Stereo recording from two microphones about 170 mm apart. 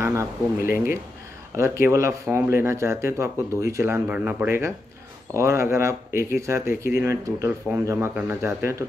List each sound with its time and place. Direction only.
0.0 s speech: 15° right (ahead or behind)